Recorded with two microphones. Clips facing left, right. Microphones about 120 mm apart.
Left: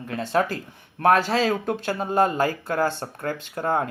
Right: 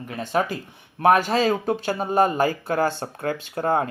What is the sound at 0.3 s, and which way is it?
Speech, centre (ahead or behind).